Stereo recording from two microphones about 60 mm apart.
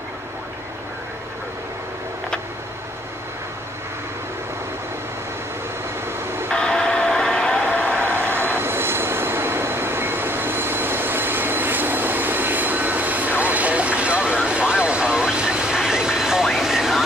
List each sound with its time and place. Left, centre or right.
6.5 s vehicle: centre
8.0 s vehicle: right; by 17.0 s centre